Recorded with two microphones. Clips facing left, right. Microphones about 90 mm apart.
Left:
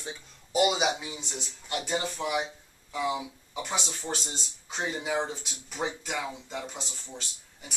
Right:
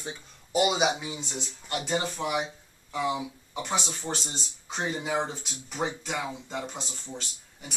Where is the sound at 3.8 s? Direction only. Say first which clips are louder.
Right 1 dB; 10° right (ahead or behind).